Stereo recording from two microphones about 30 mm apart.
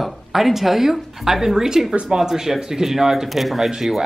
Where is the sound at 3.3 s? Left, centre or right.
Centre.